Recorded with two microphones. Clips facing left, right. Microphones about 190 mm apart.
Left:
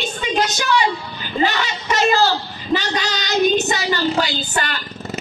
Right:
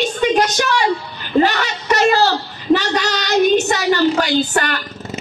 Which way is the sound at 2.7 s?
65° right (ahead or behind).